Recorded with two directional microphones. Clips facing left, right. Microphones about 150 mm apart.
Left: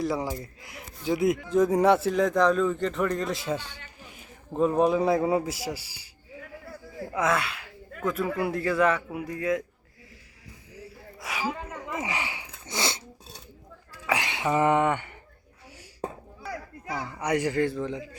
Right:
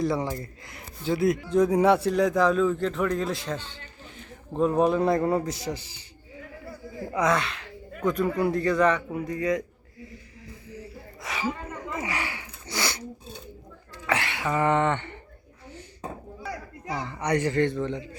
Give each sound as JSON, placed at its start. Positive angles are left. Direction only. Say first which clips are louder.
{"t": 0.0, "sound": "speech", "louder": "right 2 dB", "side_deg": 0}
{"t": 1.1, "sound": "a man's voice", "louder": "right 1 dB", "side_deg": 20}
{"t": 1.5, "sound": "a man's voice", "louder": "even", "side_deg": 0}
{"t": 11.2, "sound": "a sound", "louder": "right 1 dB", "side_deg": 5}
{"t": 11.9, "sound": "a sound", "louder": "even", "side_deg": 15}
{"t": 13.9, "sound": "speech", "louder": "right 1 dB", "side_deg": 15}
{"t": 16.9, "sound": "a man's voice", "louder": "right 1 dB", "side_deg": 5}